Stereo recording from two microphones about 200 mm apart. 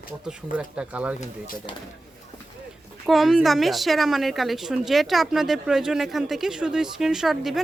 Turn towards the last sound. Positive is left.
turn(degrees=0)  # may be behind; listen again after turning